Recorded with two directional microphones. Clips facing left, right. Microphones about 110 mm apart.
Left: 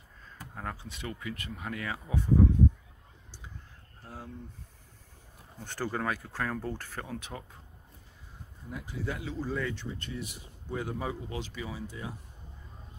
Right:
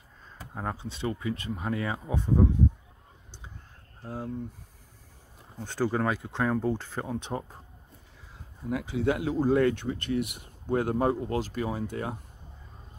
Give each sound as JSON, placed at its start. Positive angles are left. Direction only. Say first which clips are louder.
{"t": 0.6, "sound": "speech", "louder": "right 6 dB", "side_deg": -25}
{"t": 4.0, "sound": "speech", "louder": "right 8 dB", "side_deg": -20}
{"t": 5.6, "sound": "speech", "louder": "right 6 dB", "side_deg": -15}
{"t": 8.6, "sound": "speech", "louder": "right 10 dB", "side_deg": -90}
{"t": 9.3, "sound": "speech", "louder": "right 12 dB", "side_deg": -55}